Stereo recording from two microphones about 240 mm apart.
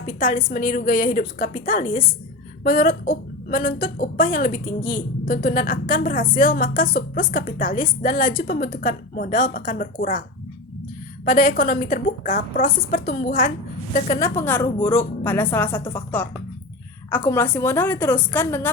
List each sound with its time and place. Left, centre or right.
0.2 s speech: left
11.3 s speech: left
14.2 s a woman's voice: centre